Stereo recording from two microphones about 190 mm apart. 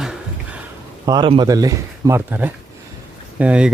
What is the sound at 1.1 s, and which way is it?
Speech, 25° right (ahead or behind).